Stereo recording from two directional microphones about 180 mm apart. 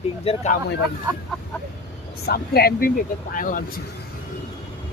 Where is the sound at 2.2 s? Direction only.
60° left (ahead or behind).